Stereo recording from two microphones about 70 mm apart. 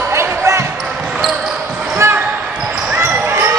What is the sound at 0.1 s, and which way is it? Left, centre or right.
Basketball bounce, right.